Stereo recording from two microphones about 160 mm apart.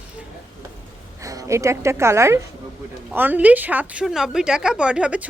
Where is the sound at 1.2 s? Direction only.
20° right (ahead or behind).